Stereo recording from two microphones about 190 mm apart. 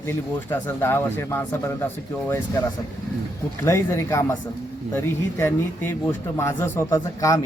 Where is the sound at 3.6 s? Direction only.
15° left (ahead or behind).